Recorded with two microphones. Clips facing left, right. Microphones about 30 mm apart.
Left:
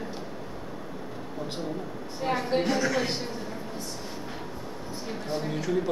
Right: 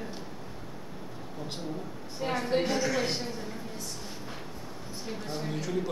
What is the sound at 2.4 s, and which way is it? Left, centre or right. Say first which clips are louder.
Speech: left 1 dB; centre.